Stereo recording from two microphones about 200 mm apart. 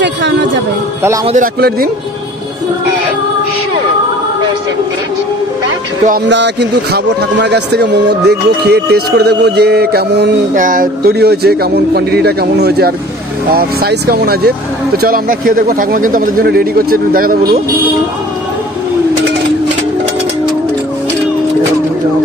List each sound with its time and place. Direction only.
1.2 s a man's voice: 35° right (ahead or behind)
6.2 s a man's voice: 60° right (ahead or behind)
10.5 s speech: 40° right (ahead or behind)